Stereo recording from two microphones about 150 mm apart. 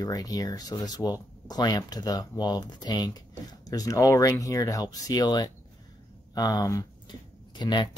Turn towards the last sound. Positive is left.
turn(degrees=30)  # may be behind; listen again after turning